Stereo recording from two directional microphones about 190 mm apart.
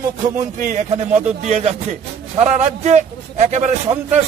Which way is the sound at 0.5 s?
45° right (ahead or behind).